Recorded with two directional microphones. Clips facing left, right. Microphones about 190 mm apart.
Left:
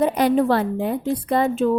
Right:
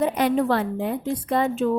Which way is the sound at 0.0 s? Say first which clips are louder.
Left 3 dB; 35° left (ahead or behind).